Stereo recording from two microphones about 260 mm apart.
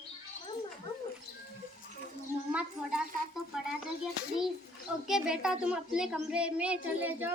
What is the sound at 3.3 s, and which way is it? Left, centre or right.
Speech, centre.